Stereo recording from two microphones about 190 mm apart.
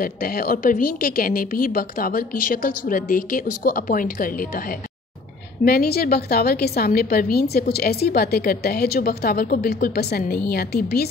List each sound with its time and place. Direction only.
0.0 s a woman's voice: 50° left (ahead or behind)